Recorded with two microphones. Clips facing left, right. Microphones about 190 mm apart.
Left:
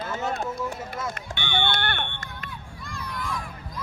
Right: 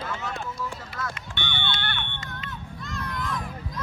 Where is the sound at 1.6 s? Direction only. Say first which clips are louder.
Left 7 dB; 45° left (ahead or behind).